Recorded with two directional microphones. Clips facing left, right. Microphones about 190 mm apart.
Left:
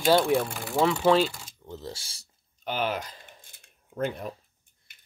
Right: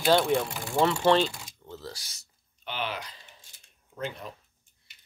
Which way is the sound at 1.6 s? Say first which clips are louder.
Left 3 dB; 20° left (ahead or behind).